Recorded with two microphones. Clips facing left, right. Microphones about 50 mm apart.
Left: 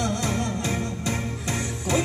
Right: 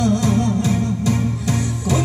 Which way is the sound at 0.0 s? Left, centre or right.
Left.